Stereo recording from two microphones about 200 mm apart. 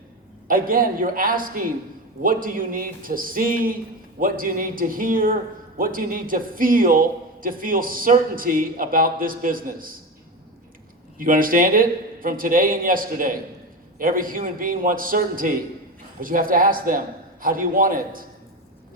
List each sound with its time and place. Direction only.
0.4 s a man's voice: 45° right (ahead or behind)
11.2 s a man's voice: 45° right (ahead or behind)